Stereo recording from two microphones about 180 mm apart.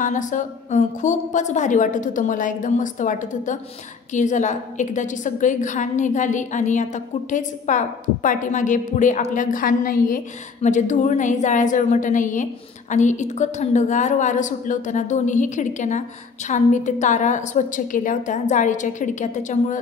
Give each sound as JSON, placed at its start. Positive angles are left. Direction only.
{"t": 0.0, "sound": "a woman's voice", "side_deg": 45}